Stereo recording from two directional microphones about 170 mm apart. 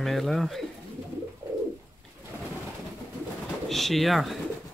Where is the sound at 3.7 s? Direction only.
Centre (ahead or behind).